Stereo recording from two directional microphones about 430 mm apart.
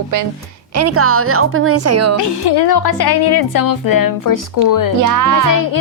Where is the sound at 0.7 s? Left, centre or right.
Right.